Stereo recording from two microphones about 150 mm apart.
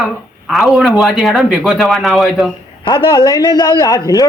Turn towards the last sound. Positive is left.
turn(degrees=25)  # may be behind; listen again after turning